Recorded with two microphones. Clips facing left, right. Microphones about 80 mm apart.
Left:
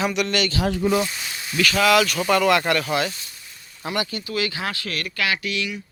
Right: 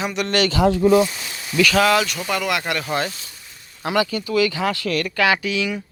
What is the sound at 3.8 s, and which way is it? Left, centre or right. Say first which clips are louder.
Speech: right 6 dB; right.